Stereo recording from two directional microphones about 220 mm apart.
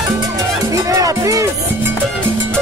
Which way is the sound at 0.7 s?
15° right (ahead or behind).